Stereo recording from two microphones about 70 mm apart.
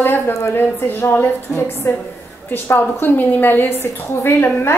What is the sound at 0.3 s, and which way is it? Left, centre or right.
A woman's voice, left.